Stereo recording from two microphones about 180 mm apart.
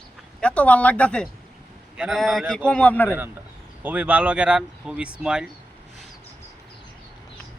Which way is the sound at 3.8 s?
10° right (ahead or behind).